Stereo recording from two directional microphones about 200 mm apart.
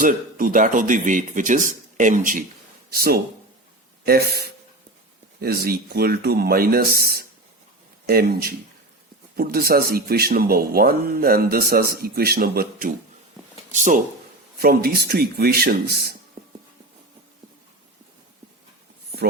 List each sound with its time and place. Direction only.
0.0 s speech: 45° right (ahead or behind)
13.7 s speech: 40° right (ahead or behind)
14.6 s speech: 50° right (ahead or behind)